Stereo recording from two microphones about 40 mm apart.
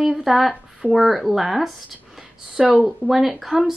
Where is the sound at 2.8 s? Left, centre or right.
Centre.